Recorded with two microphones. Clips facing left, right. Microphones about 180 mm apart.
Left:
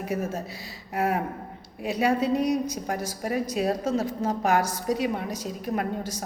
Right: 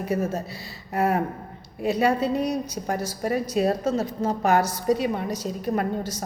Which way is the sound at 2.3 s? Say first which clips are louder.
Left 1 dB; 35° right (ahead or behind).